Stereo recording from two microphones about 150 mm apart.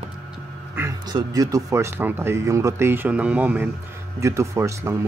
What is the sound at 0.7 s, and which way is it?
Speech, 25° right (ahead or behind).